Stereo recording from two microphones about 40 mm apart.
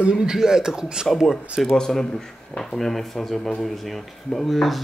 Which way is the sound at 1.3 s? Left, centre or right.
Centre.